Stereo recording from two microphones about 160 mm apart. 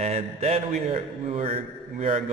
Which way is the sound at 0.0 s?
40° right (ahead or behind).